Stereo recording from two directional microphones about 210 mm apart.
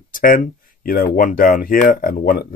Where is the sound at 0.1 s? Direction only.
40° left (ahead or behind).